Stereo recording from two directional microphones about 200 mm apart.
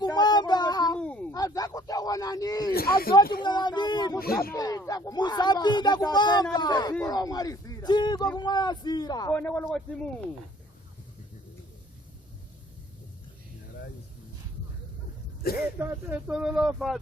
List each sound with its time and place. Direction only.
0.0 s child singing: 20° left (ahead or behind)
0.9 s a sound: 5° left (ahead or behind)
1.3 s speech: 20° left (ahead or behind)
2.7 s speech: 50° left (ahead or behind)
3.4 s speech: 20° left (ahead or behind)
9.3 s speech: 5° left (ahead or behind)
15.5 s speech: 10° right (ahead or behind)